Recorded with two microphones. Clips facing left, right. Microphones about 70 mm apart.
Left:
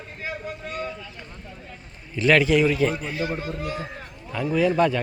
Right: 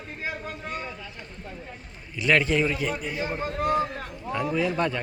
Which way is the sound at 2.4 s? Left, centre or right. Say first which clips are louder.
Left 5 dB; right.